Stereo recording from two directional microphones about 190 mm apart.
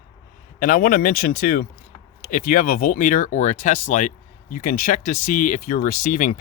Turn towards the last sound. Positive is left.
turn(degrees=40)  # may be behind; listen again after turning